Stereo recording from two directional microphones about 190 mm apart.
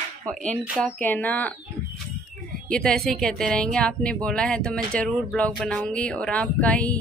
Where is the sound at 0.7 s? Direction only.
10° left (ahead or behind).